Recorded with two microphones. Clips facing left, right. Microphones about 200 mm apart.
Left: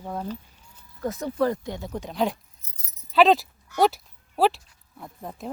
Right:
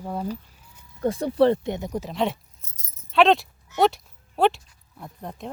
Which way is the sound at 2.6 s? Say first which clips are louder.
Right 2 dB; 45° right (ahead or behind).